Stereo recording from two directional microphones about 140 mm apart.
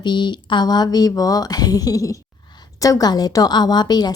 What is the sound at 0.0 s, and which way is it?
A woman's voice, 30° left (ahead or behind).